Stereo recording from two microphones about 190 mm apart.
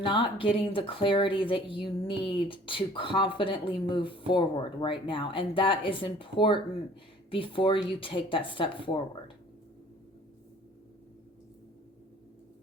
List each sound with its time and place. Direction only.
0.0 s speech: 25° left (ahead or behind)